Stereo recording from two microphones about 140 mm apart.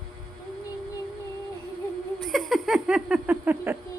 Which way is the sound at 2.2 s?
Centre (ahead or behind).